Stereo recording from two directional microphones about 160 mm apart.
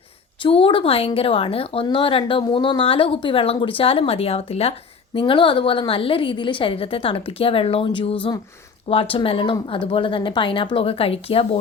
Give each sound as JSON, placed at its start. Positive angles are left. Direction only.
{"t": 0.4, "sound": "a woman's voice", "side_deg": 35}